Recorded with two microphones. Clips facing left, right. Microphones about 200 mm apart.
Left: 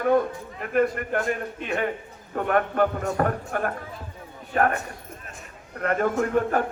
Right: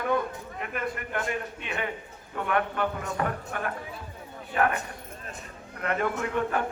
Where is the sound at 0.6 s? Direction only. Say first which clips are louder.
Left 10 dB; 45° left (ahead or behind).